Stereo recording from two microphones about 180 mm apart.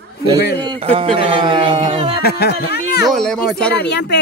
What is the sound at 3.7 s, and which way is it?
Speech, 70° left (ahead or behind).